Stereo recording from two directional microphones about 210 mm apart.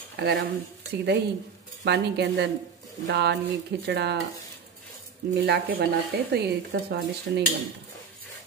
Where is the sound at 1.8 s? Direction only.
55° right (ahead or behind).